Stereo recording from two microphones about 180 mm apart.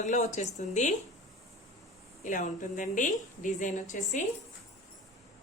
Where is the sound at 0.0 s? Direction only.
45° left (ahead or behind).